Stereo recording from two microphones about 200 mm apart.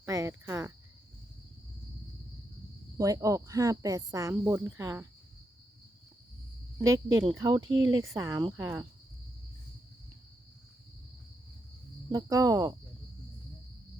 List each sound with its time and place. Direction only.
0.0 s cricket: 15° right (ahead or behind)
3.0 s speech: 15° right (ahead or behind)
6.7 s speech: 15° right (ahead or behind)
7.6 s speech: 75° right (ahead or behind)
8.1 s speech: 15° right (ahead or behind)
12.1 s speech: 20° right (ahead or behind)